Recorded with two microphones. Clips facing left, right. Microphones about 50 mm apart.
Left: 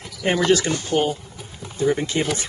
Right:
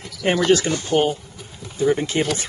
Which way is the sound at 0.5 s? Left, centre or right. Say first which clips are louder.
Right 2 dB; right.